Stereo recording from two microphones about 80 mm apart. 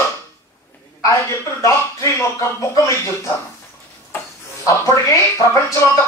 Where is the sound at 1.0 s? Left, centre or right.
Left.